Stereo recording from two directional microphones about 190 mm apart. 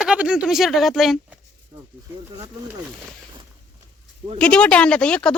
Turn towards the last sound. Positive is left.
turn(degrees=5)  # may be behind; listen again after turning